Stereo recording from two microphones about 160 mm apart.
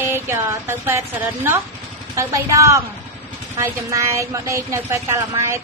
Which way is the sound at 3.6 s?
20° right (ahead or behind).